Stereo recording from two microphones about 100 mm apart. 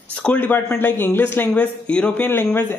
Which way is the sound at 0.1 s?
15° left (ahead or behind).